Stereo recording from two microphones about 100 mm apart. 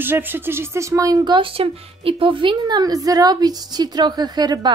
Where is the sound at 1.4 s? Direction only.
65° right (ahead or behind); by 4.7 s 45° right (ahead or behind).